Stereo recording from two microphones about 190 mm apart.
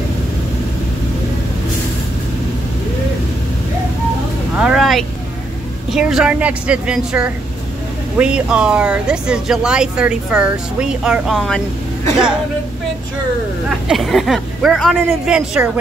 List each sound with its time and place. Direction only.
4.6 s a sound: centre (ahead or behind)
5.9 s speech: 5° right (ahead or behind)
13.7 s speech: centre (ahead or behind)